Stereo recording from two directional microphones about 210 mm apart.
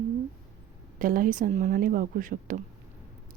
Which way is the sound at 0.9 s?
40° right (ahead or behind).